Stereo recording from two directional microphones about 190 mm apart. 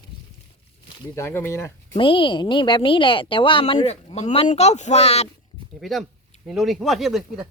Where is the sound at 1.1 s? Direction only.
10° left (ahead or behind).